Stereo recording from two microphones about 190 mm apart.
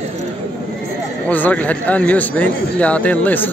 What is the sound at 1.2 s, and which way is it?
Speech, 10° left (ahead or behind).